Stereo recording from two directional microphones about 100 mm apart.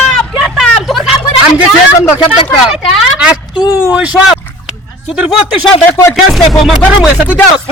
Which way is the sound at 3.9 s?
10° right (ahead or behind).